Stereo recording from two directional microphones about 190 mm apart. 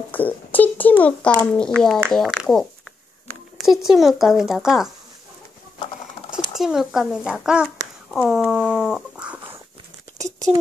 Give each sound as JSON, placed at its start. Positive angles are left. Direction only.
{"t": 0.1, "sound": "a sound", "side_deg": 10}
{"t": 1.3, "sound": "speech", "side_deg": 15}
{"t": 1.6, "sound": "speech", "side_deg": 5}
{"t": 3.6, "sound": "speech", "side_deg": 0}
{"t": 6.3, "sound": "speech", "side_deg": -5}